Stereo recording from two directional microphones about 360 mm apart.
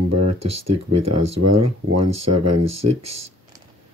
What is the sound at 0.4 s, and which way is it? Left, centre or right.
Speech, right.